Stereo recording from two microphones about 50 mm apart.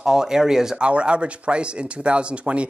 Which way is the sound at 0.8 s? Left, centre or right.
Right.